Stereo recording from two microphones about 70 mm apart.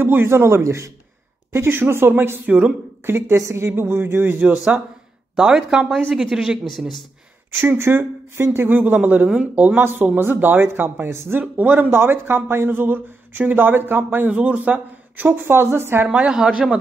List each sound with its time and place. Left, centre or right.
0.0 s speech: right
2.4 s a woman's voice: centre
3.1 s speech: right
4.4 s speech: centre
5.3 s a woman's voice: centre
7.5 s speech: right
9.8 s speech: right
11.4 s speech: right
16.1 s a woman's voice: centre